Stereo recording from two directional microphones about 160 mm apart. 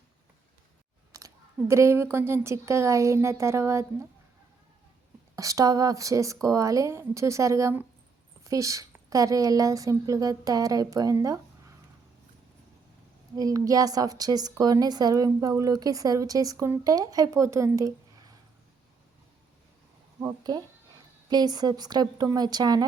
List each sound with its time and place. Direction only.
1.1 s speech: 20° right (ahead or behind)
5.4 s a woman's voice: 20° right (ahead or behind)
13.3 s a woman's voice: 20° right (ahead or behind)
20.1 s a woman's voice: 25° right (ahead or behind)